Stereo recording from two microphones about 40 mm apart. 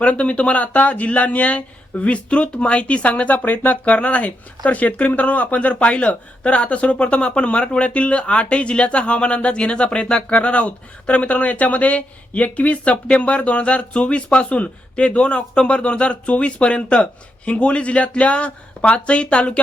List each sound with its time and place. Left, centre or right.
0.0 s speech: left